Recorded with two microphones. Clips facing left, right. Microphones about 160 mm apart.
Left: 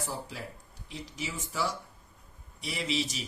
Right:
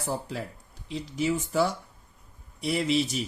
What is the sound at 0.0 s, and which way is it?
Speech, 60° right (ahead or behind).